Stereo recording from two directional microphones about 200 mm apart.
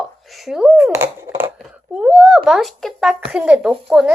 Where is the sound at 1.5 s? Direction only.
5° right (ahead or behind).